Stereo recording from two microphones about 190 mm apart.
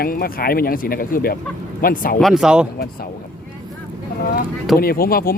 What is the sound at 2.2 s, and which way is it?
Speech, centre (ahead or behind).